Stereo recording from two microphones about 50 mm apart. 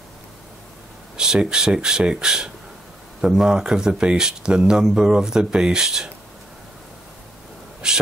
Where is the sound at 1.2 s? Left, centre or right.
Centre.